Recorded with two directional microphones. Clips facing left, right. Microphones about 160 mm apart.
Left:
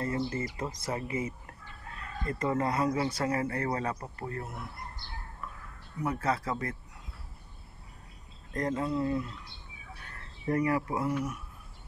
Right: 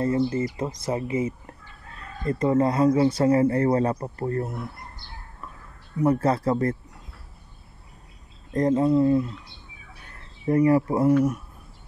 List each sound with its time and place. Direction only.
0.0 s speech: 25° right (ahead or behind)
5.4 s a sound: 30° right (ahead or behind)
6.0 s speech: 35° right (ahead or behind)
8.5 s speech: 25° right (ahead or behind)
10.4 s speech: 25° right (ahead or behind)